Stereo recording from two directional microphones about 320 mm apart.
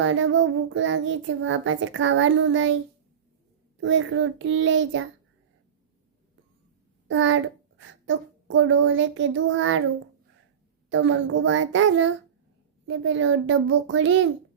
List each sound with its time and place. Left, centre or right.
0.0 s a child's voice: right
3.8 s a child's voice: right
7.1 s a child's voice: right
10.8 s a child's voice: right